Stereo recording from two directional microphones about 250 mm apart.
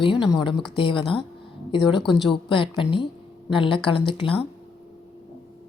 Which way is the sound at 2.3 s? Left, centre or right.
Centre.